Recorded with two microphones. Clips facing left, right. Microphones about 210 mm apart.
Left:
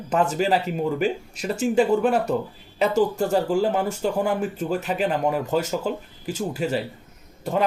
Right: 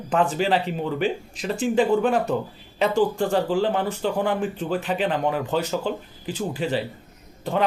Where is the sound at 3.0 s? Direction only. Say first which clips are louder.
Even; 40° left (ahead or behind).